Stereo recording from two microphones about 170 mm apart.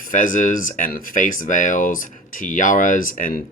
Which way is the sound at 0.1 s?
50° left (ahead or behind).